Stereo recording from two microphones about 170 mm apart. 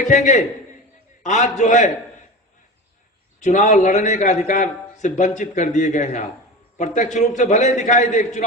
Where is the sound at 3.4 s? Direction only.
45° left (ahead or behind).